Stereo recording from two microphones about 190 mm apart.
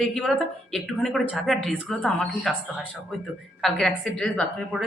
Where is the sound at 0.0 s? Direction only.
Centre (ahead or behind).